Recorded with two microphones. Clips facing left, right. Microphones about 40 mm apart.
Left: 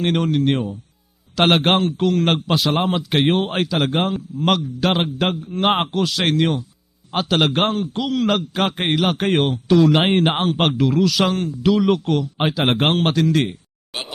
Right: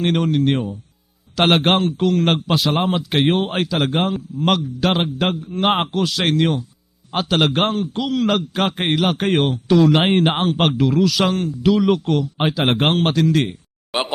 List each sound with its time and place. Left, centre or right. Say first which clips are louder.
0.0 s a man's voice: right 1 dB; centre
13.9 s speech: right 8 dB; centre